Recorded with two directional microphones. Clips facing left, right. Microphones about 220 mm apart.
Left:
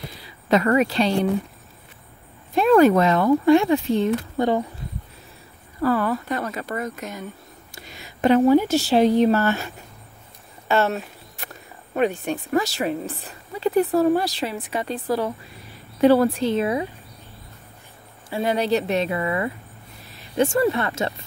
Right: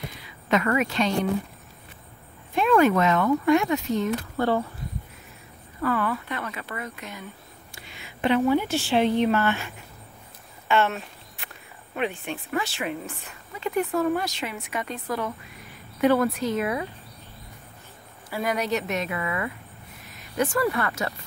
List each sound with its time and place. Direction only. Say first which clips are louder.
0.2 s a sound: left 5 dB; 35° left (ahead or behind)
2.5 s speech: left 5 dB; 35° left (ahead or behind)
4.4 s speech: left 2 dB; 15° left (ahead or behind)
5.8 s speech: left 5 dB; 35° left (ahead or behind)
10.7 s speech: left 3 dB; 40° left (ahead or behind)
18.3 s speech: left 5 dB; 30° left (ahead or behind)